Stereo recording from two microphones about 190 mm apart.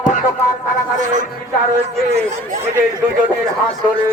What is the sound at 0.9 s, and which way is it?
Speech, 40° right (ahead or behind).